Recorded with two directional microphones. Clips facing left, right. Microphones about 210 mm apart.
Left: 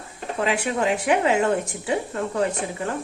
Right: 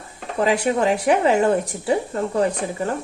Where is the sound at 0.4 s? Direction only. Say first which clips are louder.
Right 4 dB; 40° right (ahead or behind).